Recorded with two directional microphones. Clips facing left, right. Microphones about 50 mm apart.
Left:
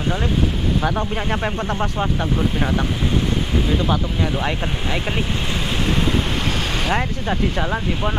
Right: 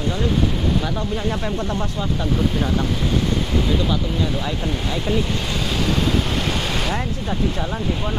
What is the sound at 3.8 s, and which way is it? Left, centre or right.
Speech, left.